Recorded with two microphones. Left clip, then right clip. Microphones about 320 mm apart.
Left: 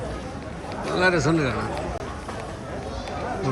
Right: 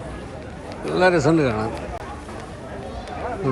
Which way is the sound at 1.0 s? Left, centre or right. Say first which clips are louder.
Right 4 dB; centre.